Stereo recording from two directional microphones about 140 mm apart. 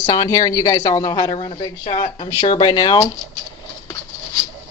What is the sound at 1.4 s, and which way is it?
Speech, 50° left (ahead or behind).